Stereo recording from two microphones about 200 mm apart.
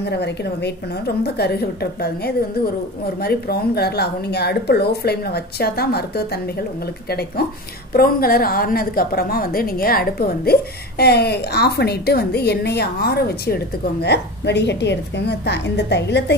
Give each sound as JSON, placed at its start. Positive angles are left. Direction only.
{"t": 0.0, "sound": "a woman's voice", "side_deg": 55}